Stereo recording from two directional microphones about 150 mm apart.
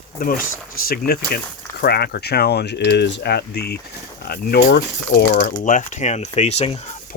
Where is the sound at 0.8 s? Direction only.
90° left.